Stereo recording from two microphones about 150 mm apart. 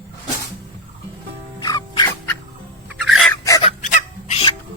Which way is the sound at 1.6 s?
25° left (ahead or behind).